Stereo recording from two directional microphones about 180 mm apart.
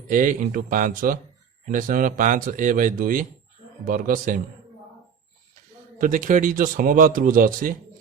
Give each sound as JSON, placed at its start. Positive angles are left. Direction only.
{"t": 0.1, "sound": "speech", "side_deg": -45}
{"t": 6.0, "sound": "speech", "side_deg": -45}